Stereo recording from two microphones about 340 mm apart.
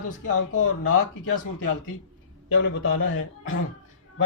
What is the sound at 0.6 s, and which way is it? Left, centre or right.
Speech, left.